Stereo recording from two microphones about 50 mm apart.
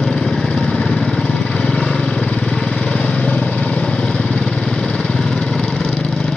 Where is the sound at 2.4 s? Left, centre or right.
Centre.